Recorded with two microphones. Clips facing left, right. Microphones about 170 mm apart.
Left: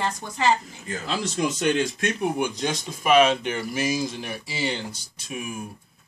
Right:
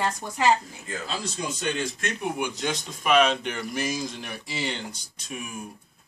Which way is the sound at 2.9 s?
5° left (ahead or behind).